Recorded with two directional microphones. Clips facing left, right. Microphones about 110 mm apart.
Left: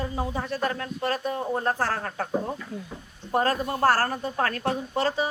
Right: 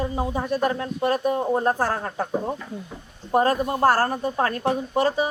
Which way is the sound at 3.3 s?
20° right (ahead or behind).